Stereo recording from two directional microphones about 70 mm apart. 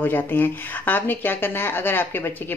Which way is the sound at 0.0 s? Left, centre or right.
Left.